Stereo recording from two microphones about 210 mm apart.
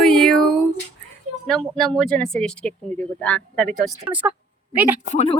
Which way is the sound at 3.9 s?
10° right (ahead or behind).